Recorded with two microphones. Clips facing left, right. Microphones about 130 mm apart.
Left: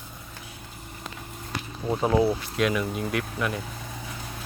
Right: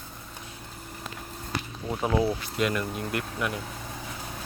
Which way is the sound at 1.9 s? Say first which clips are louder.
Left 4 dB; 20° left (ahead or behind).